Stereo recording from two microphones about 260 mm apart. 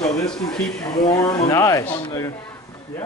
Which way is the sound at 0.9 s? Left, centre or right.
Centre.